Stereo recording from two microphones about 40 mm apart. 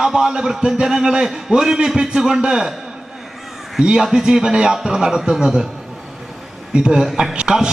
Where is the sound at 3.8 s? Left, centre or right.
Centre.